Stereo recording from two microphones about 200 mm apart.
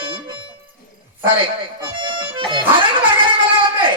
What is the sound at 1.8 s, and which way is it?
Music, 25° right (ahead or behind).